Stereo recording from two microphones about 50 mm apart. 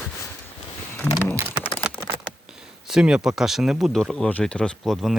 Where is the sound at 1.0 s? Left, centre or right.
Left.